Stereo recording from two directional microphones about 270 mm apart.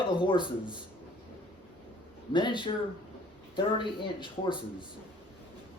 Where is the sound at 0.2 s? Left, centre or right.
Centre.